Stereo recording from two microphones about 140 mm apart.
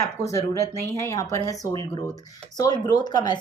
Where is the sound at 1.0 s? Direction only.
20° left (ahead or behind).